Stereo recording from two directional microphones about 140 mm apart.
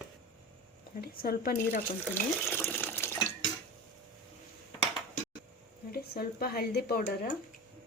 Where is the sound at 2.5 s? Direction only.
15° left (ahead or behind).